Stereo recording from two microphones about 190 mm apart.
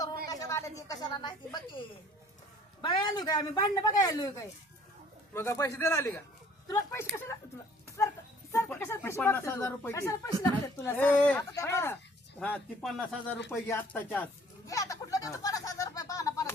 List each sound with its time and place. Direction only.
0.3 s a sound: 15° left (ahead or behind)
2.8 s speech: 25° left (ahead or behind)
7.9 s a sound: 15° left (ahead or behind)
8.5 s speech: 10° left (ahead or behind)
12.4 s speech: 5° left (ahead or behind)
14.7 s speech: 15° left (ahead or behind)